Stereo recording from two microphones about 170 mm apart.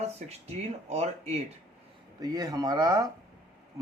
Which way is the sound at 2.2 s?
20° right (ahead or behind).